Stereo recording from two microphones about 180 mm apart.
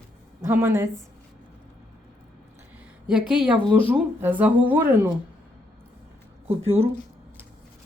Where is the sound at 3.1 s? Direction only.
5° right (ahead or behind).